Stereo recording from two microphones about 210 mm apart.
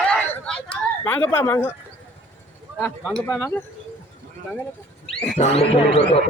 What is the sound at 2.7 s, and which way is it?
Speech, 5° left (ahead or behind).